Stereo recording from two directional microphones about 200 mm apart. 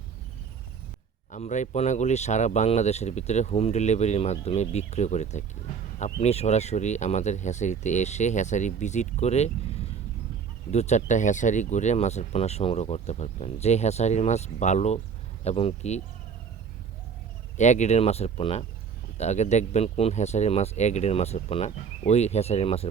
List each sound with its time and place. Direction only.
1.3 s speech: 35° left (ahead or behind)
10.7 s speech: 35° left (ahead or behind)
17.6 s speech: 35° left (ahead or behind)